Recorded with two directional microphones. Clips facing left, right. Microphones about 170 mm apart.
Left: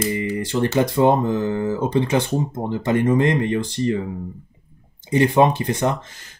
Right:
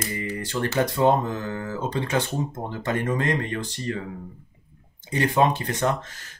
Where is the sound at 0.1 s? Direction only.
20° left (ahead or behind).